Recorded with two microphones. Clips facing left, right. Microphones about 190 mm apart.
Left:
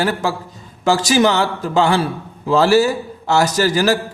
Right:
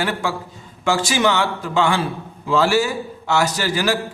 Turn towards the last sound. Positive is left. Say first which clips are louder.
# left 5 dB
turn(degrees=40)  # may be behind; listen again after turning